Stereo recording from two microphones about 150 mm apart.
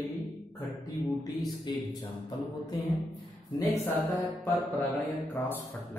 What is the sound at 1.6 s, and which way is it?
Speech, 30° left (ahead or behind).